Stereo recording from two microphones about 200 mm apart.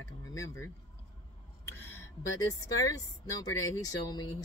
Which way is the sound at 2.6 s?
20° left (ahead or behind).